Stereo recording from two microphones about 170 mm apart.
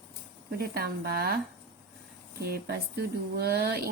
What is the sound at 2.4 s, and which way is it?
A woman's voice, 65° right (ahead or behind).